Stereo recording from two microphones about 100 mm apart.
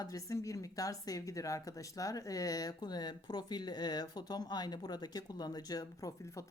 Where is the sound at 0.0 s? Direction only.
35° left (ahead or behind).